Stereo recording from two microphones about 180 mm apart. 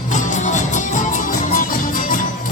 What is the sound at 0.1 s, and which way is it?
Music, 45° left (ahead or behind).